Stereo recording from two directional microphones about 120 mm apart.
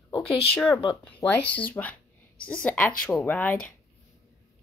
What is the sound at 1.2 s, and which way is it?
Speech, 10° left (ahead or behind).